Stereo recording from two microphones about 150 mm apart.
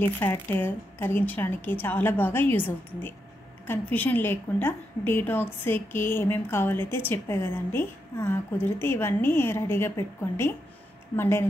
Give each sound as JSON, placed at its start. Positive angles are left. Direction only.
{"t": 0.2, "sound": "a woman's voice", "side_deg": 15}